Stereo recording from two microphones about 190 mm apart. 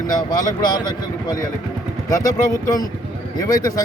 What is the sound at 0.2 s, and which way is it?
A man's voice, 20° left (ahead or behind).